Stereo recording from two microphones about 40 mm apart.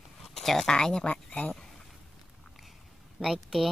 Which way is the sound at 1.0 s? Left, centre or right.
Left.